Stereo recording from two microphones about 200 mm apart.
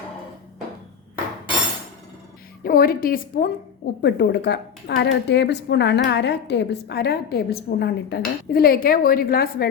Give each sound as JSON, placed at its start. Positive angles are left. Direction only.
{"t": 2.6, "sound": "a woman's voice", "side_deg": 45}
{"t": 4.0, "sound": "speech", "side_deg": 60}